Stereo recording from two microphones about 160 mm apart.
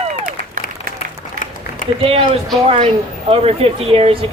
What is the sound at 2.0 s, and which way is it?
Speech, 35° right (ahead or behind).